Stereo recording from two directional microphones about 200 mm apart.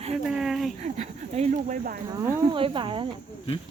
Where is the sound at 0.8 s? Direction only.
35° right (ahead or behind).